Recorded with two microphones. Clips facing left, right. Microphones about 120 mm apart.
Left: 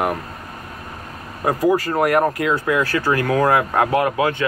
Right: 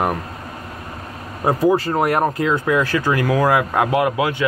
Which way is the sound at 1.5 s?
25° right (ahead or behind).